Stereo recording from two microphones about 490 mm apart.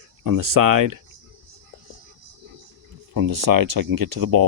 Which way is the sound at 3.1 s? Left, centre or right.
Right.